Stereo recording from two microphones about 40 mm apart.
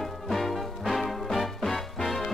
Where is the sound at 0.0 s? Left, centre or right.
Centre.